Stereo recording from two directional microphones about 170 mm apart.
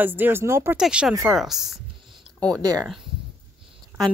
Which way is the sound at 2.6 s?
20° right (ahead or behind).